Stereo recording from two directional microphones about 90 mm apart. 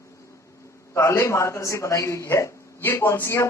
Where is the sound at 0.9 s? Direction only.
30° left (ahead or behind).